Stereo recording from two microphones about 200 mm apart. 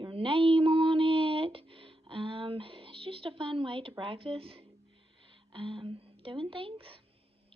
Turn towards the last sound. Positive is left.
turn(degrees=-25)  # may be behind; listen again after turning